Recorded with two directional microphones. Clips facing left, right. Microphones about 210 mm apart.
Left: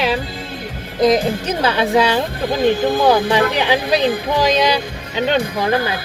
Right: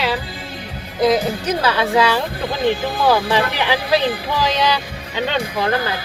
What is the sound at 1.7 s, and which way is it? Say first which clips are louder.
Speech: left 3 dB; 20° left (ahead or behind).